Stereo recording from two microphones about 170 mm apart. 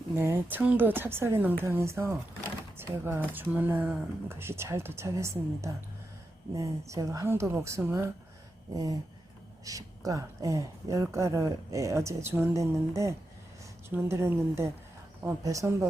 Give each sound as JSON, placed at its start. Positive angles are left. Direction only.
{"t": 0.2, "sound": "speech", "side_deg": -10}